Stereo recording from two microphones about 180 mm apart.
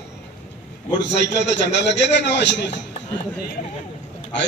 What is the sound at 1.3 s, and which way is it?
A man's voice, 75° left (ahead or behind).